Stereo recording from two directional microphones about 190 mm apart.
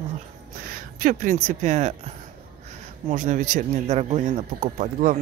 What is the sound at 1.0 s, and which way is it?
A man's voice, 45° right (ahead or behind).